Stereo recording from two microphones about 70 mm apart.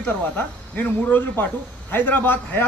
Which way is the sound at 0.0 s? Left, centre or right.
Left.